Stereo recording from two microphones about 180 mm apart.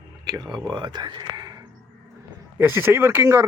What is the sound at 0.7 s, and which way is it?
Speech, 25° right (ahead or behind).